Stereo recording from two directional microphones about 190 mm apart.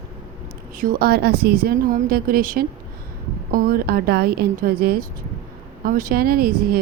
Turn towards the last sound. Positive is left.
turn(degrees=-50)  # may be behind; listen again after turning